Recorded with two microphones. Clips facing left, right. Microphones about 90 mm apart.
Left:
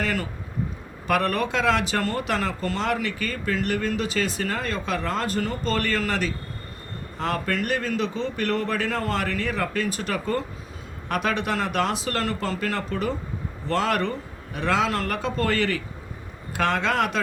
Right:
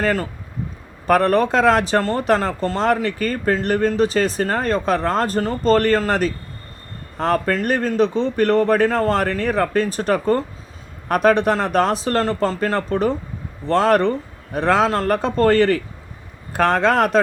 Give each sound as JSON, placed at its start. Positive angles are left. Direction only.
{"t": 0.0, "sound": "speech", "side_deg": -40}